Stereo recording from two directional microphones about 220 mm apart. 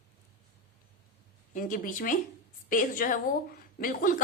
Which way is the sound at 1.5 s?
40° left (ahead or behind).